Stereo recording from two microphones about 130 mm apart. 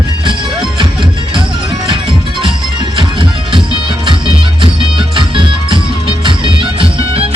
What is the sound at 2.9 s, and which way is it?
Music, 40° right (ahead or behind).